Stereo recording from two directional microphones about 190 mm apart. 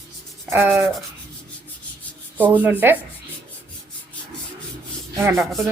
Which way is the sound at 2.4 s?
10° right (ahead or behind).